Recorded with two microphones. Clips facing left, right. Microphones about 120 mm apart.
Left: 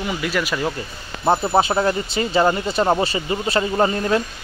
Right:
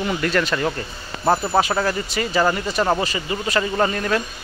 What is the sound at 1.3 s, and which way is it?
Speech, 25° left (ahead or behind).